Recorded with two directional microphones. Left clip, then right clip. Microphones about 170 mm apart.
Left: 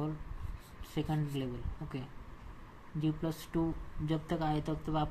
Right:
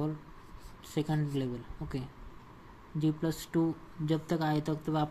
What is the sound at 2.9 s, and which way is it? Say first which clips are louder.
Speech: right 4 dB; 20° right (ahead or behind).